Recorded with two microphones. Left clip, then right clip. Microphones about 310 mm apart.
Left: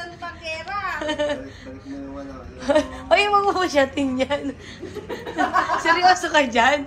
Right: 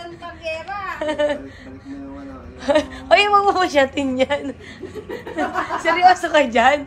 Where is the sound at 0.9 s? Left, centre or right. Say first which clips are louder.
Right 6 dB; right.